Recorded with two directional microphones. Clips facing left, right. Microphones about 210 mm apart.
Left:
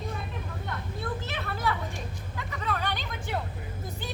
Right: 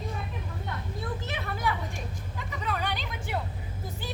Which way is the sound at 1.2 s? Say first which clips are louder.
Even; 15° right (ahead or behind).